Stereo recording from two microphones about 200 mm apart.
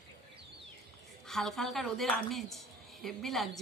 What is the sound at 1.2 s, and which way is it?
Speech, centre (ahead or behind).